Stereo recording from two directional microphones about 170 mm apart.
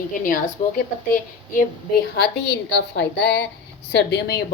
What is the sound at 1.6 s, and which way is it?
A woman's voice, 70° left (ahead or behind).